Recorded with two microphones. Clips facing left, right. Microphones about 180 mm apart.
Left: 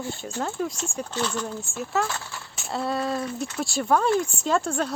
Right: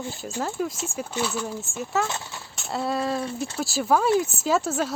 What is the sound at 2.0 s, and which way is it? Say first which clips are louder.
Speech: right 1 dB; 20° right (ahead or behind).